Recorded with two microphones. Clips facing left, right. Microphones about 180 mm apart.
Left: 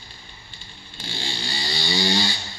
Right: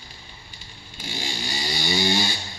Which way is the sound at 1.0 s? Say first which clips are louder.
Right 1 dB; 10° right (ahead or behind).